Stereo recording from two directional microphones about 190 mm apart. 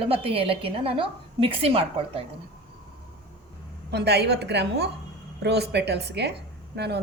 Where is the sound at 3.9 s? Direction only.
60° right (ahead or behind).